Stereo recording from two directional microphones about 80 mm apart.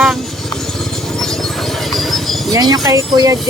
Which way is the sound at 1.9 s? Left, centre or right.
Centre.